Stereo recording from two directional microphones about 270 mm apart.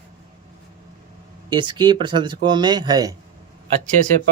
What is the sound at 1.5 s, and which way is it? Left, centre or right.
Speech, centre.